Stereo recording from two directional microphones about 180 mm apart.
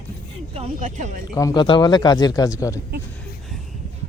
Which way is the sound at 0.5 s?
40° right (ahead or behind).